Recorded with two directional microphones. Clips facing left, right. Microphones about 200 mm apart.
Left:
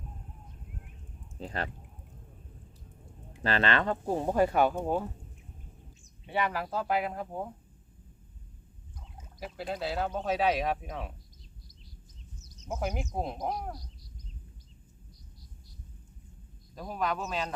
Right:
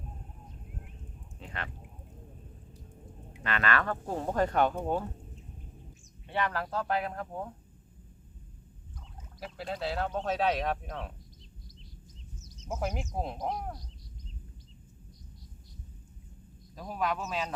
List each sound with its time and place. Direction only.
1.4 s speech: 35° left (ahead or behind)
3.4 s speech: 30° left (ahead or behind); by 5.0 s 10° left (ahead or behind)
6.2 s speech: 10° left (ahead or behind)
9.4 s speech: centre (ahead or behind)
12.6 s speech: centre (ahead or behind)
16.7 s speech: centre (ahead or behind)